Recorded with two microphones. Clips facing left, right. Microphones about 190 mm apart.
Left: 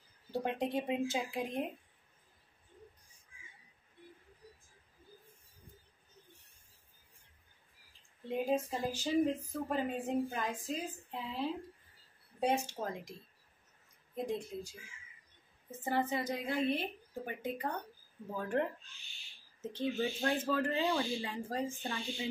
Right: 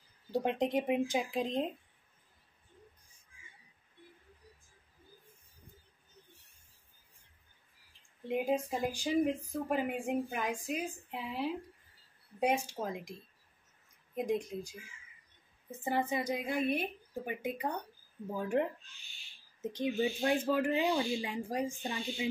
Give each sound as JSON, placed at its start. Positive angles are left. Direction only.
{"t": 0.3, "sound": "speech", "side_deg": -15}
{"t": 8.3, "sound": "speech", "side_deg": -15}
{"t": 14.1, "sound": "speech", "side_deg": -15}
{"t": 15.8, "sound": "speech", "side_deg": -15}